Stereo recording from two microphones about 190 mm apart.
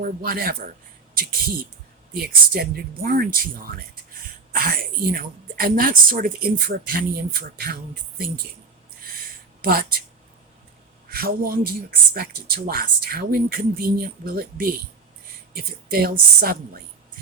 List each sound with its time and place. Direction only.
0.0 s a woman's voice: 50° right (ahead or behind)
9.2 s a sound: 50° right (ahead or behind)
11.1 s a woman's voice: 50° right (ahead or behind)